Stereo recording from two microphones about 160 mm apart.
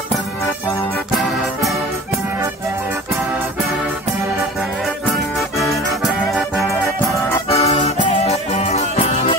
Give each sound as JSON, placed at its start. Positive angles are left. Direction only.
{"t": 6.0, "sound": "music", "side_deg": 0}
{"t": 7.4, "sound": "music", "side_deg": 40}